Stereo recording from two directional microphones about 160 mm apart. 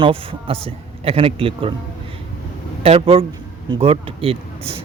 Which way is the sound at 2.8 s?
35° right (ahead or behind).